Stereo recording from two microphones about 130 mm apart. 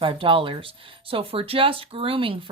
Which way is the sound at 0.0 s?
40° right (ahead or behind).